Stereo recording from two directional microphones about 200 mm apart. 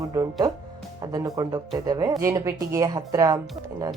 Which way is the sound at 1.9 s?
20° right (ahead or behind).